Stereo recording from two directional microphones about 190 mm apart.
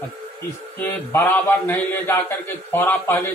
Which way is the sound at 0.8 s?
10° left (ahead or behind).